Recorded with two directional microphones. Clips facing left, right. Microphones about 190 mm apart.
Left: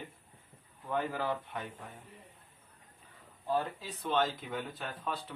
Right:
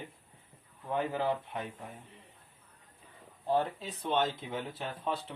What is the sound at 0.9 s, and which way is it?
Speech, 20° right (ahead or behind).